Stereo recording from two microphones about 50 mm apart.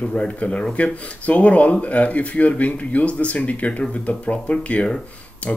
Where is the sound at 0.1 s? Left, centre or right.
Left.